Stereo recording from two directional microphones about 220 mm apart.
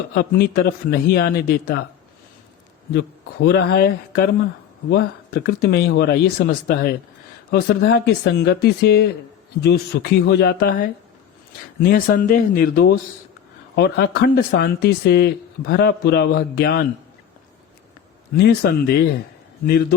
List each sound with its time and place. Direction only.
0.1 s speech: 45° left (ahead or behind)
2.9 s speech: 50° left (ahead or behind)
18.3 s speech: 50° left (ahead or behind)